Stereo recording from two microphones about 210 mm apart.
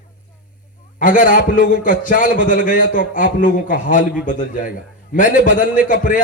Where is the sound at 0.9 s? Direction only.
40° left (ahead or behind).